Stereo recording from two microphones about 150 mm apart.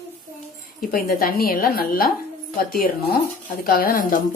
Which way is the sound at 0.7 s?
80° left.